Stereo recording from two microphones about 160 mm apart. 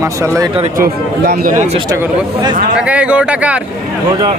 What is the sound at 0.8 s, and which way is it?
Speech, 75° right (ahead or behind).